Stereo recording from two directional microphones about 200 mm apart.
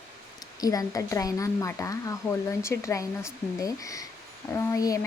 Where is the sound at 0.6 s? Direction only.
15° left (ahead or behind).